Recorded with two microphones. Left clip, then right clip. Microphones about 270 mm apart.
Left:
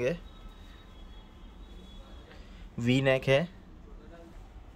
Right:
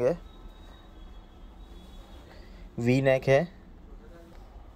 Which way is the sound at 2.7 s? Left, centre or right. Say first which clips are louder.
Right 3 dB; centre.